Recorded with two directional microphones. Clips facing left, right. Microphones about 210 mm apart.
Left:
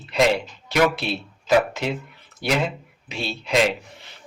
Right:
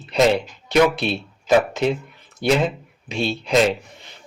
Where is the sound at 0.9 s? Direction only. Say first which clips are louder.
Right 4 dB; 20° right (ahead or behind).